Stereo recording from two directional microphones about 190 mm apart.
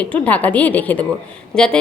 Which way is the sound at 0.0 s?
5° left (ahead or behind).